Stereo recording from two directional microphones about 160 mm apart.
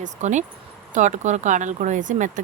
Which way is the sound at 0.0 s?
50° right (ahead or behind).